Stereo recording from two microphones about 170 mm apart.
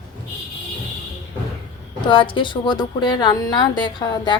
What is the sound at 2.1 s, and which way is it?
A woman's voice, 30° left (ahead or behind).